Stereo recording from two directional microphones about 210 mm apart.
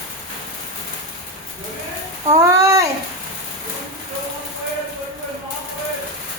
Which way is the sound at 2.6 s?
15° right (ahead or behind).